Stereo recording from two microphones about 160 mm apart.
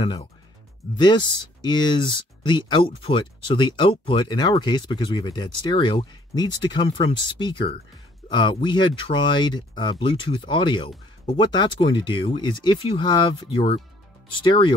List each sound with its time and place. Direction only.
0.0 s speech: 30° left (ahead or behind)